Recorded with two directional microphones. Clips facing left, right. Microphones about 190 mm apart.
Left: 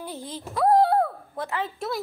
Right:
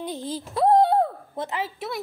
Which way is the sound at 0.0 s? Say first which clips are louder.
Right 4 dB; 20° right (ahead or behind).